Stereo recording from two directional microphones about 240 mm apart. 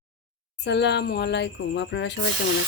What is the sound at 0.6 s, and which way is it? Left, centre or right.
Speech, left.